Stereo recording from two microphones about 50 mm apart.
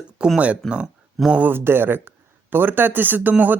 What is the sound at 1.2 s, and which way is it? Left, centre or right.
Speech, centre.